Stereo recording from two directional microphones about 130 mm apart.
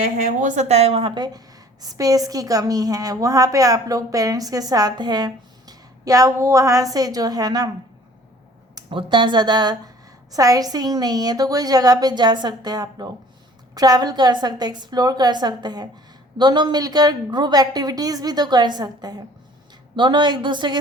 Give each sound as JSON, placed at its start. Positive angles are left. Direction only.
{"t": 0.3, "sound": "a woman's voice", "side_deg": -70}
{"t": 8.7, "sound": "a woman's voice", "side_deg": -40}